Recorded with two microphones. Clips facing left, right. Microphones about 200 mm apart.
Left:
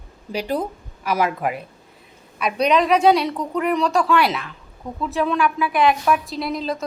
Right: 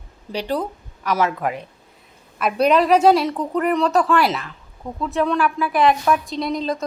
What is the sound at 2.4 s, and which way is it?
A woman's voice, 5° right (ahead or behind).